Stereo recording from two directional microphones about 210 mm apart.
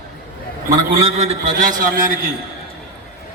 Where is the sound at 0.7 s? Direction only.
25° right (ahead or behind); by 2.3 s 40° right (ahead or behind).